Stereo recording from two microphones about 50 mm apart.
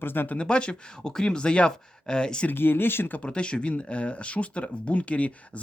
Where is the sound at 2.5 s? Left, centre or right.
Left.